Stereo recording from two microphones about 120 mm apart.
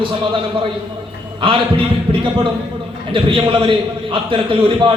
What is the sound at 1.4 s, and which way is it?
A man's voice, 45° right (ahead or behind).